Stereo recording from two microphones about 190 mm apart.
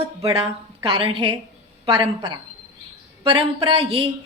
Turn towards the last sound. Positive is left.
turn(degrees=-30)  # may be behind; listen again after turning